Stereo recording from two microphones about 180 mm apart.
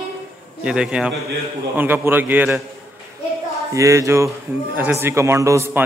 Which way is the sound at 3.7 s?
15° right (ahead or behind).